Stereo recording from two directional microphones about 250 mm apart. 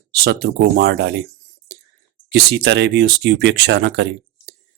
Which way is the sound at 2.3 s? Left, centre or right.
Right.